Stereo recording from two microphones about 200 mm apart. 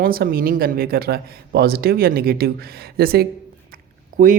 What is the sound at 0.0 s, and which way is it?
Speech, 50° right (ahead or behind).